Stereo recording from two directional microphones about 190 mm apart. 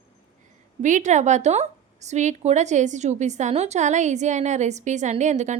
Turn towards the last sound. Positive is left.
turn(degrees=-40)  # may be behind; listen again after turning